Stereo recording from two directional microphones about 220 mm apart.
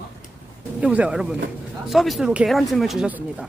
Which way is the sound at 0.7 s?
5° right (ahead or behind).